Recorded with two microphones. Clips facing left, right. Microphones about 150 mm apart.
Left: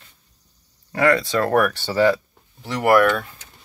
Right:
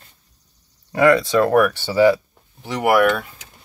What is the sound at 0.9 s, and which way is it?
Speech, 15° right (ahead or behind).